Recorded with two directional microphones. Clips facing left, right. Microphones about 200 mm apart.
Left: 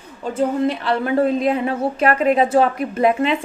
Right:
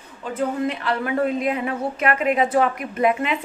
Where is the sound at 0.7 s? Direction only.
35° left (ahead or behind).